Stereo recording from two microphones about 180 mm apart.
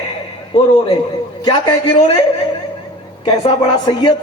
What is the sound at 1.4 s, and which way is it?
Speech, 25° left (ahead or behind).